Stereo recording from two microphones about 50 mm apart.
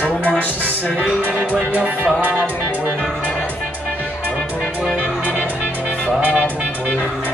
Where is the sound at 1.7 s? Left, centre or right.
Right.